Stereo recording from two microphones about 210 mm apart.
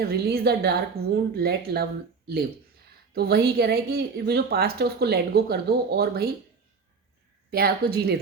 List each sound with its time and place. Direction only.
0.0 s speech: 45° right (ahead or behind)
3.1 s speech: 50° right (ahead or behind)
7.5 s speech: 45° right (ahead or behind)